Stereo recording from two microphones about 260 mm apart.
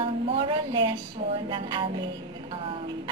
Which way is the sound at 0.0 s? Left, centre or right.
Centre.